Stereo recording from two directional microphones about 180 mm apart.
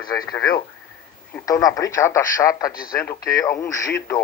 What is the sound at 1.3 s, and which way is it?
Speech, 20° left (ahead or behind).